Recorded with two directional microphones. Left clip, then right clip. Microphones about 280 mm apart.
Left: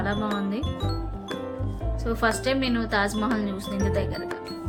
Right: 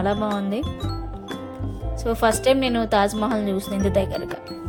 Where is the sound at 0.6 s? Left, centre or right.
Centre.